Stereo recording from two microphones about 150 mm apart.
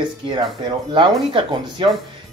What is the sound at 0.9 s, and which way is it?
Speech, 35° right (ahead or behind).